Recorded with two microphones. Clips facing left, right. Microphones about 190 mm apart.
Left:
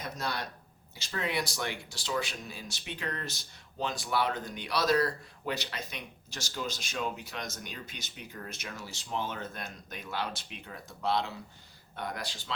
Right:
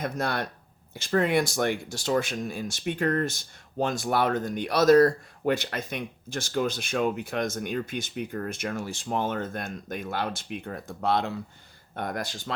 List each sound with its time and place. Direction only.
0.0 s speech: 55° right (ahead or behind)